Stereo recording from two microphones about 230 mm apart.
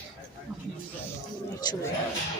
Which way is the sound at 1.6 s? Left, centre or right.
Centre.